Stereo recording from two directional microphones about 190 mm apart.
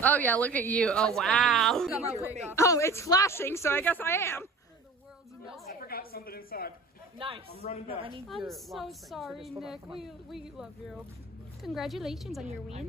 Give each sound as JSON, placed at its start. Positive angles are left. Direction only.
{"t": 0.0, "sound": "a woman's voice", "side_deg": 10}
{"t": 2.5, "sound": "a woman's voice", "side_deg": 15}
{"t": 5.9, "sound": "a woman's voice", "side_deg": 50}
{"t": 7.2, "sound": "a man's voice", "side_deg": -30}
{"t": 7.6, "sound": "a woman's voice", "side_deg": 35}
{"t": 8.5, "sound": "a woman's voice", "side_deg": 0}